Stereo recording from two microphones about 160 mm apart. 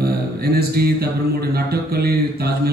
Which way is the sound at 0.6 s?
75° right (ahead or behind).